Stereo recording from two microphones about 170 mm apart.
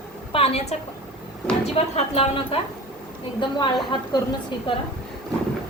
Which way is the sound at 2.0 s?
35° left (ahead or behind).